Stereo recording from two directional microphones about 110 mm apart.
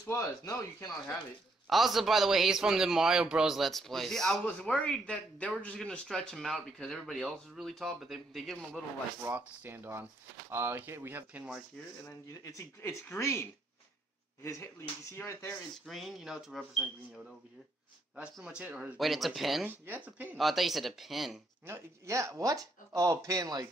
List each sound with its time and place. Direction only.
0.0 s speech: 30° left (ahead or behind)
1.7 s speech: centre (ahead or behind)
9.2 s speech: 20° right (ahead or behind)
12.0 s speech: 30° left (ahead or behind)
15.9 s speech: centre (ahead or behind)
18.1 s speech: 10° right (ahead or behind)
18.9 s speech: centre (ahead or behind)
19.7 s speech: 15° right (ahead or behind)
20.3 s speech: centre (ahead or behind)
21.6 s speech: 25° right (ahead or behind)